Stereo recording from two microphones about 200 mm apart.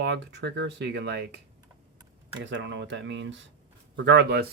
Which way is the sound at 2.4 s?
65° right (ahead or behind).